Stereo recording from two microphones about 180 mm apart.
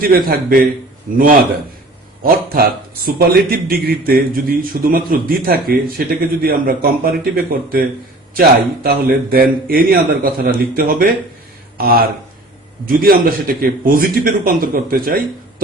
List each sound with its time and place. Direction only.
0.0 s a man's voice: 55° right (ahead or behind)